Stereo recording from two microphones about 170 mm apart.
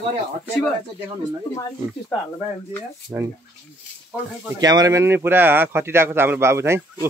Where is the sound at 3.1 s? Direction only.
5° right (ahead or behind).